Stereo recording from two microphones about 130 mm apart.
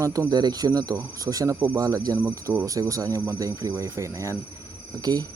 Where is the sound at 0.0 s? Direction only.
25° right (ahead or behind).